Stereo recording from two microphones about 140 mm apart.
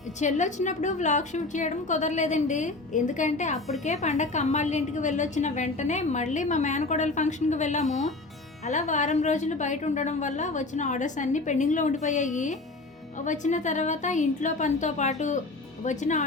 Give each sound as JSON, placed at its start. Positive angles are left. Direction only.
{"t": 0.2, "sound": "a woman's voice", "side_deg": 60}